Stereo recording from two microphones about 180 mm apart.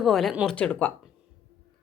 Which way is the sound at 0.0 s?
Centre (ahead or behind).